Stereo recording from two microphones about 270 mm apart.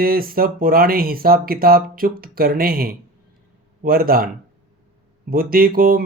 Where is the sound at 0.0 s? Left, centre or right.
Right.